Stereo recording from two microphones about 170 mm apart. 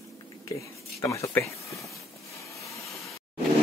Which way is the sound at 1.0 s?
15° left (ahead or behind).